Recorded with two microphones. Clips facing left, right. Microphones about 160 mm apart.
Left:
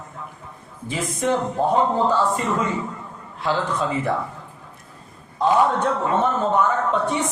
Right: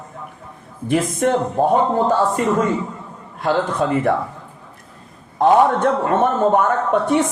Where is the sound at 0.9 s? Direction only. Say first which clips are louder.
Right 7 dB; 60° right (ahead or behind).